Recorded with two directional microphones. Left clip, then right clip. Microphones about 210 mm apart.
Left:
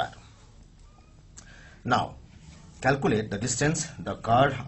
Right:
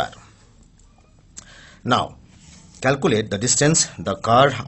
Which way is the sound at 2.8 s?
40° right (ahead or behind).